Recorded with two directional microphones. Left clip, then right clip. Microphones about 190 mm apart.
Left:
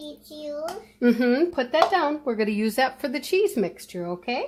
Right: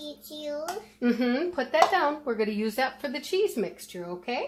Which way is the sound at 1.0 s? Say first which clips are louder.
Left 6 dB; 60° left (ahead or behind).